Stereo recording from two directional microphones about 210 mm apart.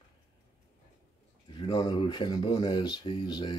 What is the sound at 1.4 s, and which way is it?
Speech, 20° left (ahead or behind).